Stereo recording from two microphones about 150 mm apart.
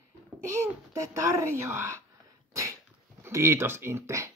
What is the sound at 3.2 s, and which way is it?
Speech, 20° right (ahead or behind).